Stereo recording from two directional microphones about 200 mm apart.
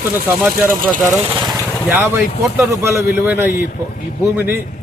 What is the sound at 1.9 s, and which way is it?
A man's voice, 10° right (ahead or behind).